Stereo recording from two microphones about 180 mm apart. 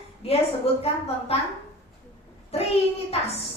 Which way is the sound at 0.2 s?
35° left (ahead or behind).